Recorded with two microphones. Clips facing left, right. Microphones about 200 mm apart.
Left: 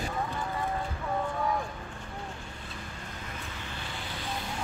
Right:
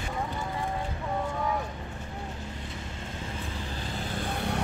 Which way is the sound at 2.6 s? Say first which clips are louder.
Right 3 dB; 25° right (ahead or behind).